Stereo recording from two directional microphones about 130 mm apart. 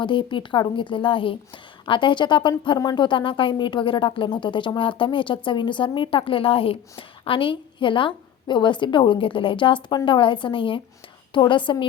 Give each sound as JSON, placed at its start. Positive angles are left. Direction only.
{"t": 0.0, "sound": "a woman's voice", "side_deg": 40}